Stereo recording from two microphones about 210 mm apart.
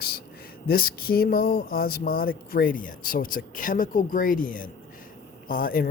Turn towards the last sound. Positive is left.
turn(degrees=45)  # may be behind; listen again after turning